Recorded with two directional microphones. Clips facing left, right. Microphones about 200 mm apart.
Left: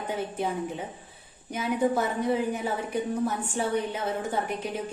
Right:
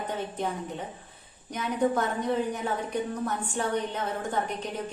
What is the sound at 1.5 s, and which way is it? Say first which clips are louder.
A woman's voice: left 1 dB; 5° left (ahead or behind).